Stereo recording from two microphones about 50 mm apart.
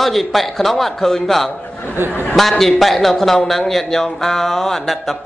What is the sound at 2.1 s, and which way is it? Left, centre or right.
Speech, left.